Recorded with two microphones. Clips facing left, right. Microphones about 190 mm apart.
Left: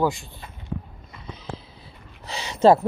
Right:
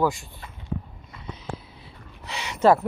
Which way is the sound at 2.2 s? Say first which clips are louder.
Left 3 dB; 35° left (ahead or behind).